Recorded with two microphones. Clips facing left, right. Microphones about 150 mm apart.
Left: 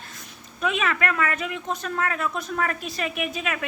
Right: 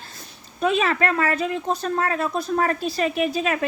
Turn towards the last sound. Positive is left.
turn(degrees=-35)  # may be behind; listen again after turning